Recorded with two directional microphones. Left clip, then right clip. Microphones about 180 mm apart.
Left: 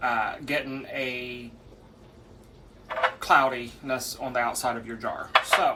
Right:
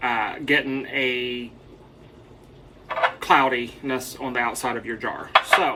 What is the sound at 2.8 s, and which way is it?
Speech, centre (ahead or behind).